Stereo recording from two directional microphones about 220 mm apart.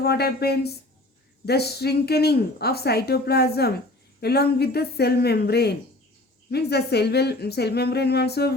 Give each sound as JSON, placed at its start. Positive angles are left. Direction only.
{"t": 0.0, "sound": "speech", "side_deg": 45}